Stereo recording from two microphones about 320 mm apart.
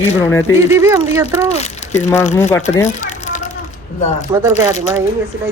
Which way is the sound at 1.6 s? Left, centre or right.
Left.